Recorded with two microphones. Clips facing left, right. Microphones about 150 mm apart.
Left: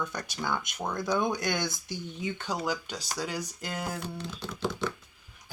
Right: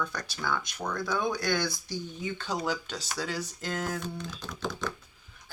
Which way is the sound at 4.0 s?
30° left (ahead or behind).